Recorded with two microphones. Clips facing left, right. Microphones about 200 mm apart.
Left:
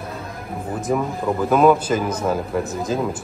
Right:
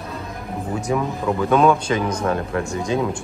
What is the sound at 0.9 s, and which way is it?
Speech, centre (ahead or behind).